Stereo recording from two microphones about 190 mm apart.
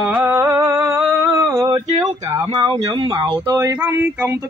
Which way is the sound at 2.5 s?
25° right (ahead or behind).